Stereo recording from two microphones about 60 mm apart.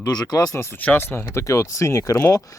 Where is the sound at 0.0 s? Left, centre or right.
Left.